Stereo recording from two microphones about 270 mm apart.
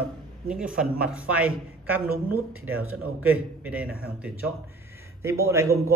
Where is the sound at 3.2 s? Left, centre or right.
Centre.